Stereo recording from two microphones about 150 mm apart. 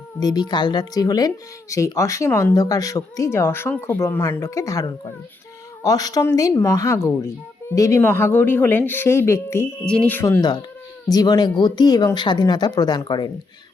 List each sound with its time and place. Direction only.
0.2 s speech: 25° left (ahead or behind)
9.8 s speech: 5° left (ahead or behind)
11.1 s speech: 25° left (ahead or behind)